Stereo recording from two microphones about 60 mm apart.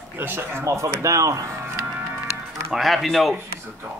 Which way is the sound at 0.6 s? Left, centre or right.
Right.